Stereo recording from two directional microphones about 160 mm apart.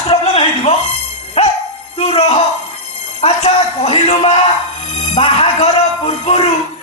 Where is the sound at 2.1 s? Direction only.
40° left (ahead or behind).